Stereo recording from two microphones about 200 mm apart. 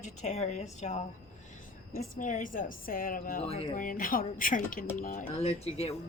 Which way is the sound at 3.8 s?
45° left (ahead or behind).